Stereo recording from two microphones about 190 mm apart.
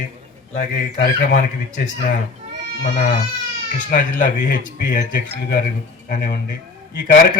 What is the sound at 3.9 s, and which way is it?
Speech, 45° left (ahead or behind).